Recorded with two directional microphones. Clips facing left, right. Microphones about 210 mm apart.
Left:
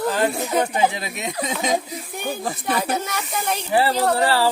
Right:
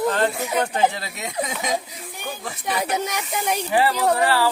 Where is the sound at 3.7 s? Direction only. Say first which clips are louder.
Left 1 dB; 35° left (ahead or behind).